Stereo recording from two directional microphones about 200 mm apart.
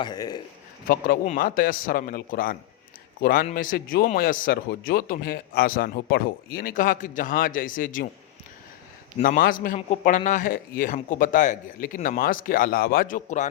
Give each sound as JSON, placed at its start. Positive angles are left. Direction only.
{"t": 0.0, "sound": "a man's voice", "side_deg": 20}
{"t": 0.9, "sound": "a man's voice", "side_deg": 45}
{"t": 9.1, "sound": "speech", "side_deg": 40}